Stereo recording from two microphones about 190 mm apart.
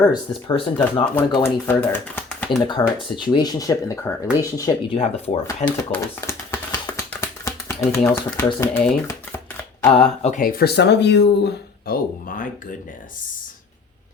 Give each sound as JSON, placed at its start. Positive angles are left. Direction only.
{"t": 0.0, "sound": "speech", "side_deg": 25}
{"t": 1.0, "sound": "speech", "side_deg": 10}
{"t": 2.6, "sound": "speech", "side_deg": 25}
{"t": 4.9, "sound": "speech", "side_deg": 35}
{"t": 5.9, "sound": "tap", "side_deg": 10}
{"t": 7.1, "sound": "a sound", "side_deg": 10}
{"t": 8.6, "sound": "speech", "side_deg": 10}
{"t": 9.9, "sound": "speech", "side_deg": 35}
{"t": 10.4, "sound": "speech", "side_deg": 50}